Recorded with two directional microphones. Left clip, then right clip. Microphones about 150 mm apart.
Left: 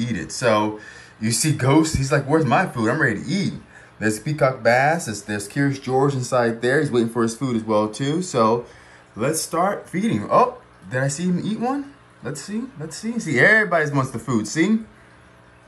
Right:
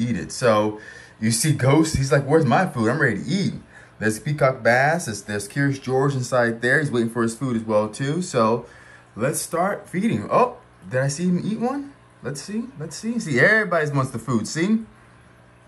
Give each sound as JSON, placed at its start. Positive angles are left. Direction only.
{"t": 0.0, "sound": "speech", "side_deg": 5}
{"t": 9.6, "sound": "speech", "side_deg": 20}